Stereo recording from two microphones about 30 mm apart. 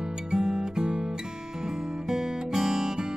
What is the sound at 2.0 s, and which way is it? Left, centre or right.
Music, right.